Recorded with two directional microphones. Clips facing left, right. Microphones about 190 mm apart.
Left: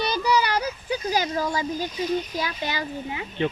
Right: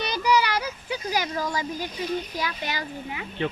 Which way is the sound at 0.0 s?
35° left (ahead or behind).